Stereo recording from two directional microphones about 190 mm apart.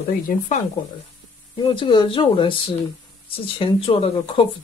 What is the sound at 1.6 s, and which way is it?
Speech, 25° left (ahead or behind).